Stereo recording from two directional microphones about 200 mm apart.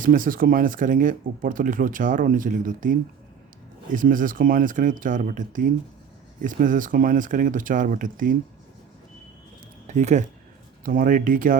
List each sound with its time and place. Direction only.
0.0 s speech: 45° right (ahead or behind)
9.8 s speech: 35° right (ahead or behind)